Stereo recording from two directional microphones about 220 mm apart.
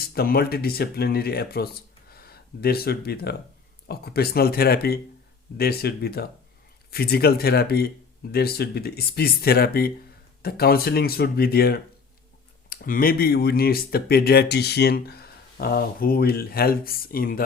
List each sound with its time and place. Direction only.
0.0 s speech: 45° left (ahead or behind)